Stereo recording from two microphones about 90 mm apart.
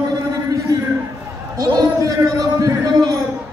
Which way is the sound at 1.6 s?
40° right (ahead or behind).